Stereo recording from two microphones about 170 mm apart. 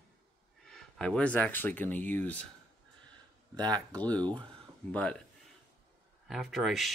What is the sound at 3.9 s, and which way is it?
Speech, 10° left (ahead or behind).